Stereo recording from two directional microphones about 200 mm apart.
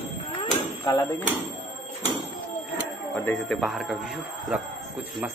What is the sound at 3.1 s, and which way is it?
Speech, 10° left (ahead or behind).